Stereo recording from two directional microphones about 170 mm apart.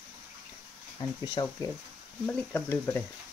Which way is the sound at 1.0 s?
20° left (ahead or behind).